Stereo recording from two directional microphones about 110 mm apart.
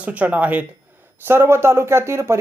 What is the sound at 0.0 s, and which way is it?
Speech, 10° right (ahead or behind).